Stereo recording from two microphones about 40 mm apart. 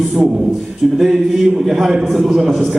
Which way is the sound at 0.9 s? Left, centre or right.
Centre.